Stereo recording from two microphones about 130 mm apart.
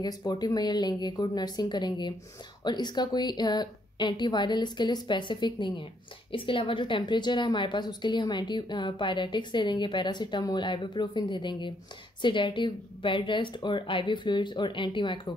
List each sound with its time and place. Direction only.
0.0 s a woman's voice: 30° left (ahead or behind)